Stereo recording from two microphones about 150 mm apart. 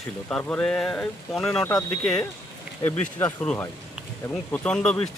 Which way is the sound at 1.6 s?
20° left (ahead or behind).